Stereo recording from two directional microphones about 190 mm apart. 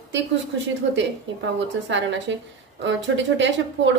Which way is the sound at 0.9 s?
70° right (ahead or behind).